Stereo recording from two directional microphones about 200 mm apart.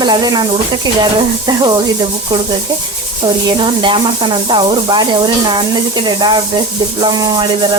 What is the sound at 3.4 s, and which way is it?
Speech, 25° right (ahead or behind).